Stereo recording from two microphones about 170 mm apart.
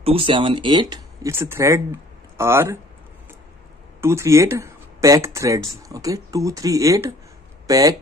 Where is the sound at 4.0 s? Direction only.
15° right (ahead or behind).